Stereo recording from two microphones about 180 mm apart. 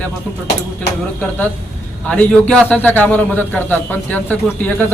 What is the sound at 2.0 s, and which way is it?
A man's voice, 5° left (ahead or behind).